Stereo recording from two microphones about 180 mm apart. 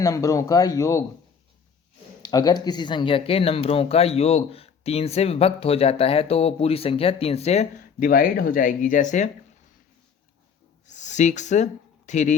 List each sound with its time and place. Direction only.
0.0 s speech: 20° left (ahead or behind)
2.2 s speech: 20° left (ahead or behind); by 9.3 s 45° left (ahead or behind)
10.8 s speech: 40° left (ahead or behind)